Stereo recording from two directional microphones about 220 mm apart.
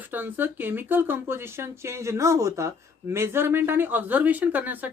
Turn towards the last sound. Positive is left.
turn(degrees=-10)  # may be behind; listen again after turning